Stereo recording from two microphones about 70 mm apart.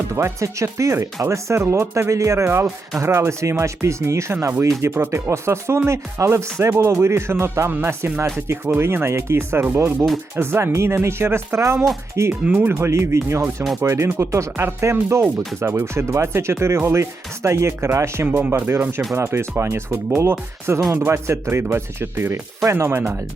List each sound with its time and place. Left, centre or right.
0.1 s speech: right
7.8 s speech: right
8.2 s speech: right
12.3 s speech: right
18.3 s speech: right